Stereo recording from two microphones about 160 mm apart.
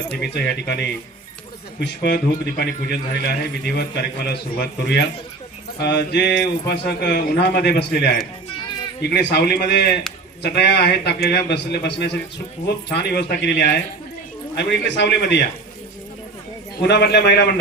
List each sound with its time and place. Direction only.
0.2 s a man's voice: 90° left
16.8 s speech: 90° left